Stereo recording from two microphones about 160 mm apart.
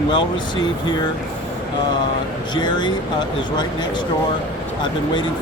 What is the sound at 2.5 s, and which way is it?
Speech, 30° left (ahead or behind).